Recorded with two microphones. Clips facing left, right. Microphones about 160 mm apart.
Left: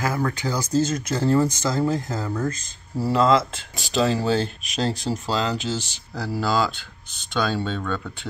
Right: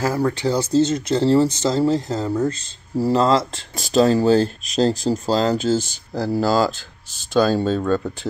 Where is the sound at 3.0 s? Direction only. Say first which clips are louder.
Right 1 dB; 35° right (ahead or behind).